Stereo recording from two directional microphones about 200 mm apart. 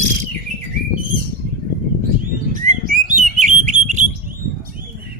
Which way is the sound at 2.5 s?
40° right (ahead or behind).